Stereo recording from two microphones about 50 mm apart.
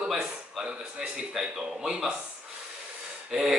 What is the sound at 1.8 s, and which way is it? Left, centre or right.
Speech, centre.